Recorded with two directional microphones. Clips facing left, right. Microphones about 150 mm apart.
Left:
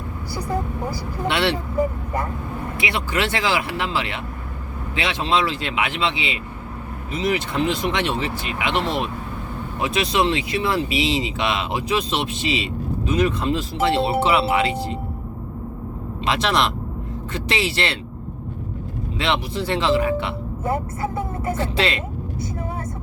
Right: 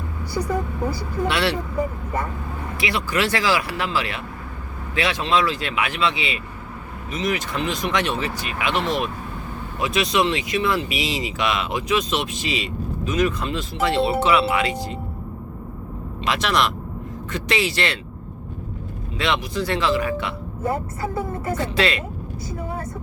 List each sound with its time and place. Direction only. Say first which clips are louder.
1.3 s speech: left 2 dB; 25° left (ahead or behind)
2.7 s speech: right 1 dB; 25° left (ahead or behind)
16.2 s speech: left 1 dB; 25° left (ahead or behind)
19.2 s speech: even; 25° left (ahead or behind)
21.5 s speech: right 1 dB; 25° left (ahead or behind)